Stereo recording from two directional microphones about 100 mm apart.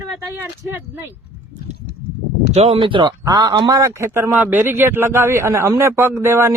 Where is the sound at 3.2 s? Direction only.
45° right (ahead or behind).